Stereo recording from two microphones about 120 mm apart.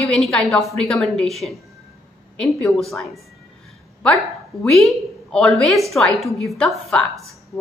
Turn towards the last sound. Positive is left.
turn(degrees=5)  # may be behind; listen again after turning